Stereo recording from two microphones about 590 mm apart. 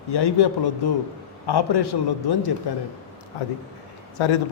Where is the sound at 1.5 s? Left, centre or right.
Left.